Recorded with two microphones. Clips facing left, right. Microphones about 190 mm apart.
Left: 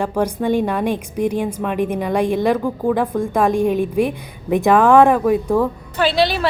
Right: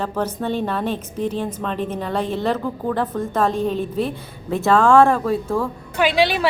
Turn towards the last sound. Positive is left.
turn(degrees=-15)  # may be behind; listen again after turning